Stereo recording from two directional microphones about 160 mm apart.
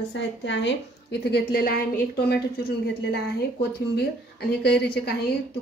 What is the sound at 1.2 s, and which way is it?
A woman's voice, 80° left.